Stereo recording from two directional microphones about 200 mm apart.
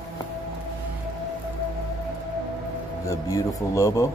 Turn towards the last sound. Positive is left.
turn(degrees=15)  # may be behind; listen again after turning